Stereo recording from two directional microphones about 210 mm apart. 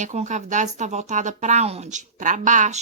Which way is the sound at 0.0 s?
35° right (ahead or behind).